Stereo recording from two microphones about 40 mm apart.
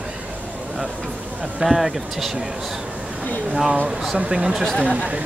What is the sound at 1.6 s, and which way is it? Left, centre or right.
Speech, centre.